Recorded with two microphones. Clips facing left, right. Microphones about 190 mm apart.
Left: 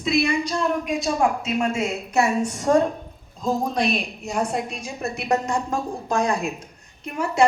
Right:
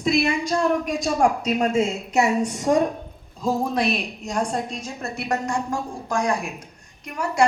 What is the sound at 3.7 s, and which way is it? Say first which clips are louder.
A woman's voice: even; centre (ahead or behind).